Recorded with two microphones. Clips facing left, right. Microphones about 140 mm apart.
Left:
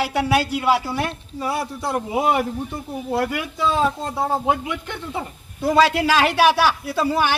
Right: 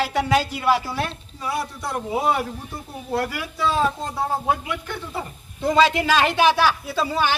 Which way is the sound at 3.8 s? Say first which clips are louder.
Left 1 dB; centre (ahead or behind).